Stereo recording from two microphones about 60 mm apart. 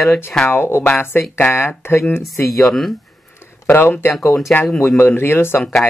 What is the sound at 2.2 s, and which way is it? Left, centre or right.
Speech, centre.